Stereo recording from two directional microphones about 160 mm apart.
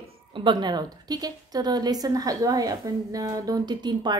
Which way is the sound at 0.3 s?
30° right (ahead or behind).